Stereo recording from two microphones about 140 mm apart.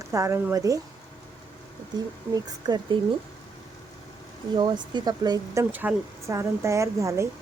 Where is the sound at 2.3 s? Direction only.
30° right (ahead or behind).